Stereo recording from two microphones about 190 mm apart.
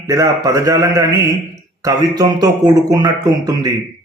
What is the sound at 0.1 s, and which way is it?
A man's voice, 15° right (ahead or behind).